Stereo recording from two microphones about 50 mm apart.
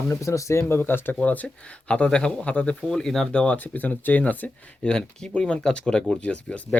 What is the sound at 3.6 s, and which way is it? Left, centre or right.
Speech, left.